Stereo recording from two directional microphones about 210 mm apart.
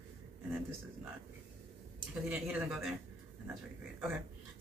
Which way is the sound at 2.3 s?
10° right (ahead or behind).